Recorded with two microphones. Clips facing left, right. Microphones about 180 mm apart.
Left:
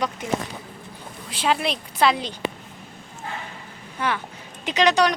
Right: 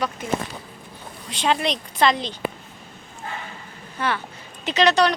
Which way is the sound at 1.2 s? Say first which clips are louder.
Right 1 dB; 5° left (ahead or behind).